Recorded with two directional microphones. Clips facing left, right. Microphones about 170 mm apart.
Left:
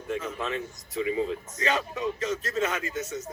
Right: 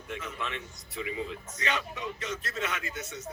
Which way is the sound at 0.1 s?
40° left (ahead or behind).